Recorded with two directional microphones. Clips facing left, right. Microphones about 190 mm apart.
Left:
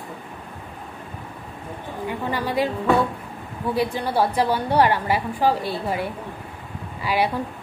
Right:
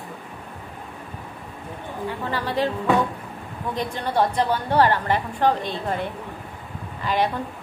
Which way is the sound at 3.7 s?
10° left (ahead or behind).